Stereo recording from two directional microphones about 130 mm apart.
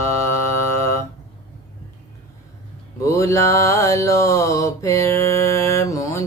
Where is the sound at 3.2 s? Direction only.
25° left (ahead or behind).